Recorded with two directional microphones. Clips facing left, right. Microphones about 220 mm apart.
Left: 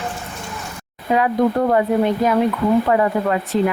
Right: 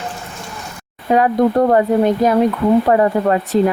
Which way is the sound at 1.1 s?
40° right (ahead or behind).